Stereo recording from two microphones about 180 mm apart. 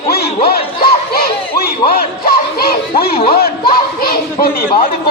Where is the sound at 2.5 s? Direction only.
55° left (ahead or behind).